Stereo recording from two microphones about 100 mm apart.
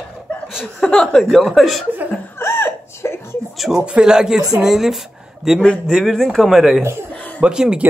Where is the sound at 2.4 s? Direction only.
25° left (ahead or behind).